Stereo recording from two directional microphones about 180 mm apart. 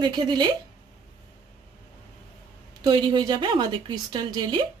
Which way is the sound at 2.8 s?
25° right (ahead or behind).